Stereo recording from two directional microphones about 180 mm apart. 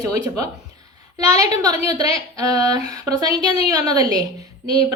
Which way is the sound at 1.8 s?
20° right (ahead or behind).